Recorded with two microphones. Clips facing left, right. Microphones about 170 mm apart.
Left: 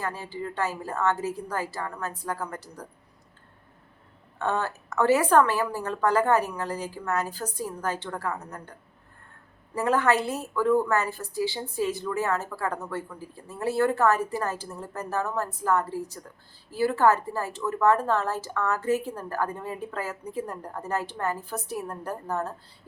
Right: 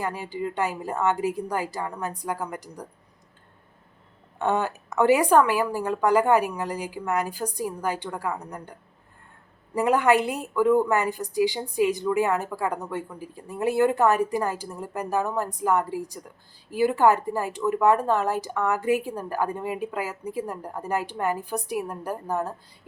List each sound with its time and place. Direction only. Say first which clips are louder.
0.0 s a woman's voice: right 3 dB; 15° right (ahead or behind)
4.4 s a woman's voice: right 3 dB; 15° right (ahead or behind)
9.7 s a woman's voice: right 3 dB; 15° right (ahead or behind)